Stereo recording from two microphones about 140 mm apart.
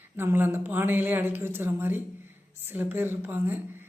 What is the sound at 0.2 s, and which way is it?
A woman's voice, 15° right (ahead or behind).